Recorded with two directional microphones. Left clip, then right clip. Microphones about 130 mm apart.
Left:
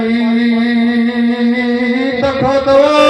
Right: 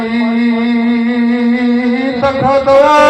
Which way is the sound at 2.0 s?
40° left (ahead or behind).